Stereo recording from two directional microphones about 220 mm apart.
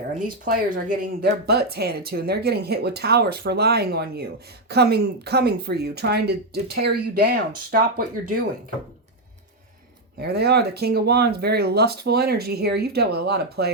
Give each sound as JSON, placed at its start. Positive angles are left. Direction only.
{"t": 0.1, "sound": "speech", "side_deg": -40}
{"t": 10.2, "sound": "speech", "side_deg": -45}